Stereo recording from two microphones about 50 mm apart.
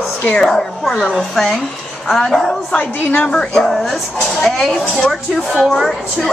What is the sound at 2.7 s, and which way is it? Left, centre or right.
Speech, left.